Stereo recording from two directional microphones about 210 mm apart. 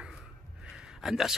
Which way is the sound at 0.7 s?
5° right (ahead or behind).